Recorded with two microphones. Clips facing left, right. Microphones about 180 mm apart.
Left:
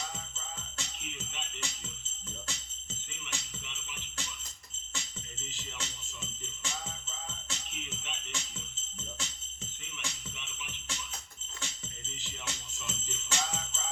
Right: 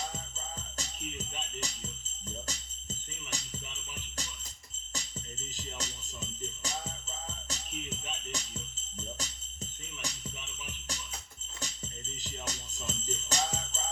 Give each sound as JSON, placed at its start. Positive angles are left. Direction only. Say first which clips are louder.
{"t": 0.3, "sound": "music", "louder": "right 2 dB", "side_deg": -40}
{"t": 2.5, "sound": "jingle bell", "louder": "right 2 dB", "side_deg": -40}
{"t": 3.2, "sound": "music", "louder": "right 3 dB", "side_deg": -40}
{"t": 4.9, "sound": "music", "louder": "right 2 dB", "side_deg": -40}
{"t": 11.6, "sound": "jingle bell", "louder": "right 3 dB", "side_deg": -40}